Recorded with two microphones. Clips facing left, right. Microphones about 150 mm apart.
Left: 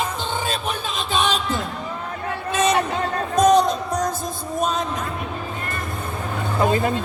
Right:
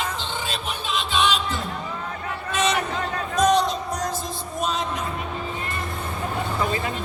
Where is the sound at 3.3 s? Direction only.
45° left (ahead or behind).